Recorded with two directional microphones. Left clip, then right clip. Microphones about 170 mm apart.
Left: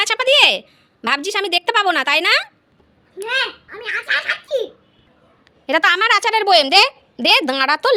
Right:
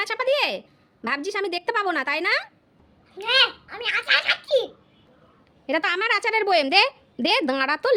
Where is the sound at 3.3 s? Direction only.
45° right (ahead or behind).